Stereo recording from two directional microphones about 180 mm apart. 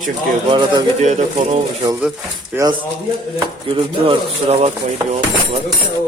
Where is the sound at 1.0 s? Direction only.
40° right (ahead or behind).